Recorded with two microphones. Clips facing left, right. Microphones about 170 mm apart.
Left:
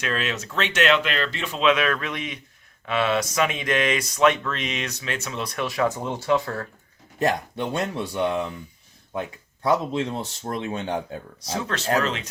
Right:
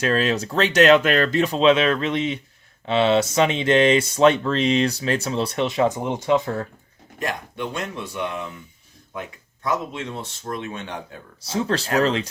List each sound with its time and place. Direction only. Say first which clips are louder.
0.0 s speech: right 7 dB; 35° right (ahead or behind); by 6.7 s 20° right (ahead or behind)
7.2 s speech: left 4 dB; 35° left (ahead or behind)
9.6 s speech: left 4 dB; 35° left (ahead or behind)
11.4 s speech: right 3 dB; 30° right (ahead or behind)